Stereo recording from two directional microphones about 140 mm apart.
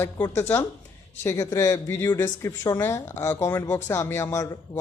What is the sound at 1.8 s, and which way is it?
Speech, 15° left (ahead or behind).